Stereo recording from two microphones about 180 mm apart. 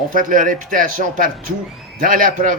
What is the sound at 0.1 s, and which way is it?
Speech, 50° right (ahead or behind).